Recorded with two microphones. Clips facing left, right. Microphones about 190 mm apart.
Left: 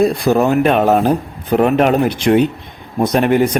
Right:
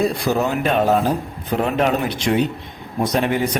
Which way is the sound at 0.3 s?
55° left (ahead or behind).